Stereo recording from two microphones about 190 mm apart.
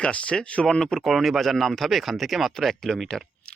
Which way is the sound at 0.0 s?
5° left (ahead or behind).